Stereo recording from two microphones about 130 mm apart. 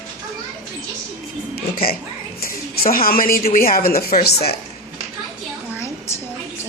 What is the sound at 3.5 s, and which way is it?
Speech, 90° left.